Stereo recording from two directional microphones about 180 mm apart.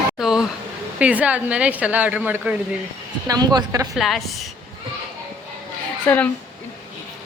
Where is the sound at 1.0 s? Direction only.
5° right (ahead or behind).